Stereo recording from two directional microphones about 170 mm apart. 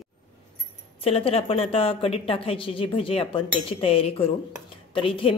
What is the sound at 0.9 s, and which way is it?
Speech, 35° left (ahead or behind).